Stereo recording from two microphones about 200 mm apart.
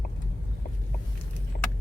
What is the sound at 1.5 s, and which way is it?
Vehicle, 50° left (ahead or behind).